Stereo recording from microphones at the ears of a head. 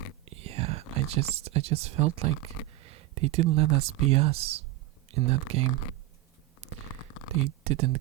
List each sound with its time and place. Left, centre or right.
0.3 s whispering: right
0.9 s speech: right
6.7 s a sound: left
7.3 s speech: right